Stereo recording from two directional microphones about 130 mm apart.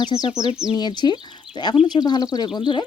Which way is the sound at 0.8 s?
35° left (ahead or behind).